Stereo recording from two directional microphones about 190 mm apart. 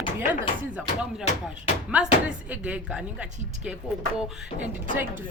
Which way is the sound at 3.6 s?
5° right (ahead or behind).